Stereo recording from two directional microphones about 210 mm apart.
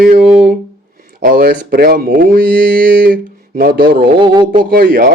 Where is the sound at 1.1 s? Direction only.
45° right (ahead or behind).